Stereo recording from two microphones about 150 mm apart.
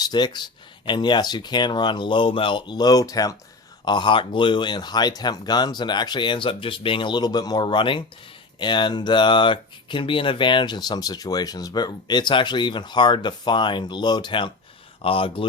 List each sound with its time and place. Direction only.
0.0 s speech: 30° left (ahead or behind)